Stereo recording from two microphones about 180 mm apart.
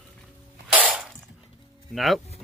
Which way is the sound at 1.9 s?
Centre (ahead or behind).